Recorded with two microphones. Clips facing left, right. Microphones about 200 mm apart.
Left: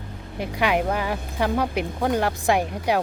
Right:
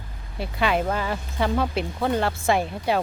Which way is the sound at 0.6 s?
15° left (ahead or behind).